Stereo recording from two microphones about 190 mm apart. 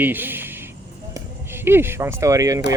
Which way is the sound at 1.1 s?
10° right (ahead or behind).